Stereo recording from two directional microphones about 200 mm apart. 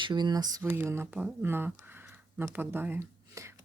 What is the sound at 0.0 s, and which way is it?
Speech, 20° right (ahead or behind).